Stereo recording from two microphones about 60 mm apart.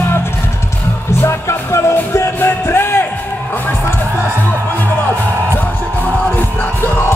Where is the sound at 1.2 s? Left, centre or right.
Left.